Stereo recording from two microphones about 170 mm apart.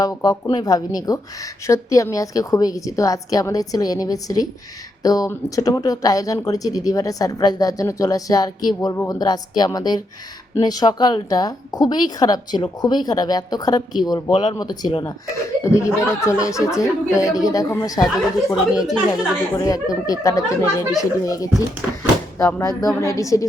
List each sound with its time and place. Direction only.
0.0 s speech: 20° left (ahead or behind)